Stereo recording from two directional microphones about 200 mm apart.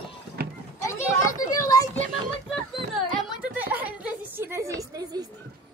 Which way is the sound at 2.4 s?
Centre (ahead or behind).